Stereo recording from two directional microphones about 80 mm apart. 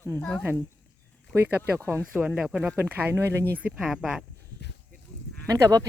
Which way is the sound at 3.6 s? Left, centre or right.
Centre.